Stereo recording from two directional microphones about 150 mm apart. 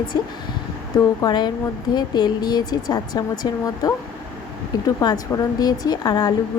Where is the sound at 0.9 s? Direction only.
30° left (ahead or behind).